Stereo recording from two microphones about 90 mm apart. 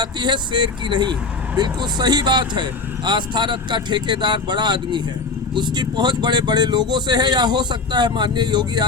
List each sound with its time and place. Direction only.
0.0 s speech: 55° right (ahead or behind)